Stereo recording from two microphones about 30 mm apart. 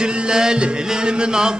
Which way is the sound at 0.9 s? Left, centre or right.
Right.